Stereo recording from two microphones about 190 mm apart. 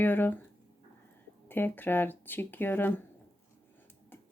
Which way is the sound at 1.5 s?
10° left (ahead or behind).